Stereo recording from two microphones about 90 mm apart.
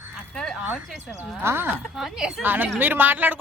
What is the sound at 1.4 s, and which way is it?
Speech, 25° right (ahead or behind).